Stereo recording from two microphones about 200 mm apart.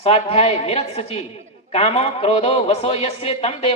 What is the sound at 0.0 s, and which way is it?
A man's voice, 30° left (ahead or behind).